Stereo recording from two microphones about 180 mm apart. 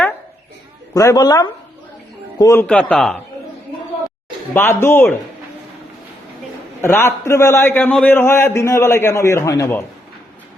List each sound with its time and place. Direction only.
0.9 s a man's voice: 20° left (ahead or behind)
2.6 s a man's voice: 5° left (ahead or behind)
4.5 s a man's voice: 10° left (ahead or behind)
6.8 s a man's voice: 15° left (ahead or behind)